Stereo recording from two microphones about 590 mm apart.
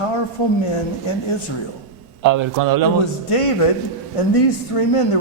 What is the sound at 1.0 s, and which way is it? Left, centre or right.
Speech, left.